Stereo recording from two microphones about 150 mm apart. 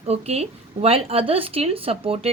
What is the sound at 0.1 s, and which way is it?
A woman's voice, 45° right (ahead or behind).